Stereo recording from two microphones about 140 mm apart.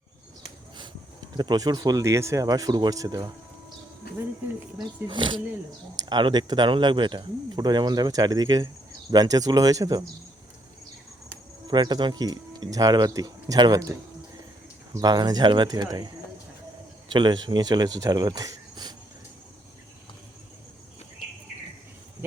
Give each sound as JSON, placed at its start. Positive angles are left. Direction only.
{"t": 1.4, "sound": "speech", "side_deg": -30}
{"t": 5.0, "sound": "speech", "side_deg": -35}
{"t": 11.7, "sound": "speech", "side_deg": -30}
{"t": 14.9, "sound": "speech", "side_deg": -30}
{"t": 17.1, "sound": "speech", "side_deg": -30}